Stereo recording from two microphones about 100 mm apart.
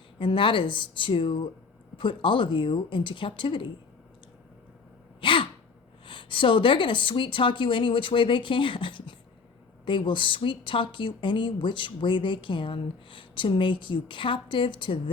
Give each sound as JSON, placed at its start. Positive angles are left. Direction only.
{"t": 0.2, "sound": "a woman's voice", "side_deg": 60}
{"t": 5.2, "sound": "sneeze", "side_deg": 60}
{"t": 6.1, "sound": "a woman's voice", "side_deg": 55}